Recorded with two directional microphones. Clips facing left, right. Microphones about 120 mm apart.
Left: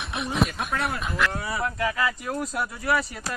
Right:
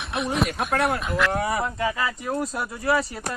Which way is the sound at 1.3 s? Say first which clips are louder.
Right 6 dB; 55° right (ahead or behind).